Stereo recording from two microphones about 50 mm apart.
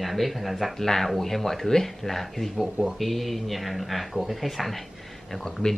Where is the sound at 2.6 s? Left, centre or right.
Centre.